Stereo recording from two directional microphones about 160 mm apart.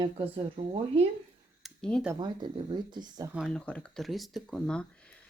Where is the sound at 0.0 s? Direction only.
30° right (ahead or behind).